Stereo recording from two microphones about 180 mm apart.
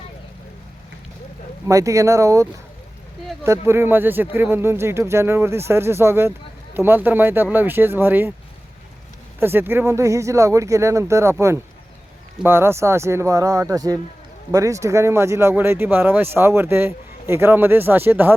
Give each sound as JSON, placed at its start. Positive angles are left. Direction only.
{"t": 1.6, "sound": "speech", "side_deg": -15}
{"t": 9.4, "sound": "speech", "side_deg": -10}